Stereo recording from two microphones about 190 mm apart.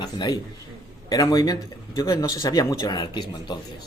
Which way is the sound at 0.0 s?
20° left (ahead or behind).